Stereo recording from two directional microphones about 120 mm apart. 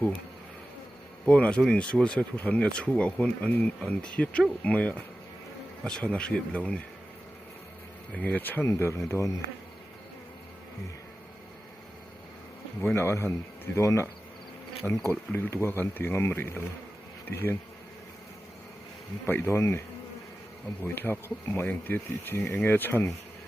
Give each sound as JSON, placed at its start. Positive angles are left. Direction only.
{"t": 1.2, "sound": "speech", "side_deg": 10}
{"t": 8.1, "sound": "speech", "side_deg": 10}
{"t": 12.8, "sound": "speech", "side_deg": 20}
{"t": 14.8, "sound": "speech", "side_deg": 5}
{"t": 19.2, "sound": "speech", "side_deg": 20}
{"t": 20.8, "sound": "speech", "side_deg": 15}